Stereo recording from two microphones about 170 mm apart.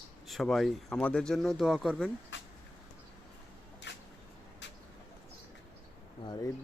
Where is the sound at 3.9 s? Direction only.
90° left.